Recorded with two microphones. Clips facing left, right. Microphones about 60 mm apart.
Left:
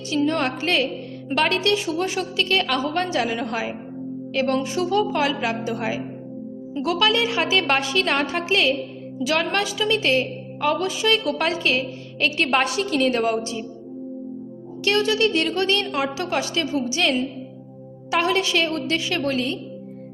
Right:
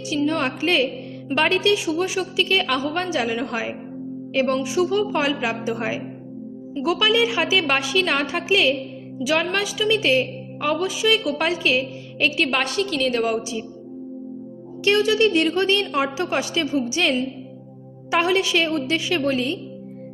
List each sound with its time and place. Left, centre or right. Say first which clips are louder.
0.1 s a woman's voice: even; centre
12.5 s a woman's voice: left 2 dB; centre
14.8 s a woman's voice: right 2 dB; centre
19.2 s a woman's voice: right 2 dB; centre